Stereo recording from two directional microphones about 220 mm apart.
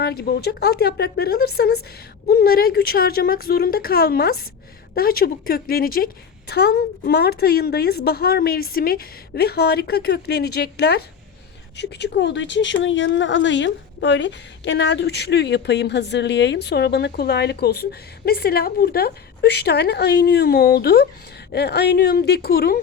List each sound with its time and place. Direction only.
0.0 s speech: 45° left (ahead or behind)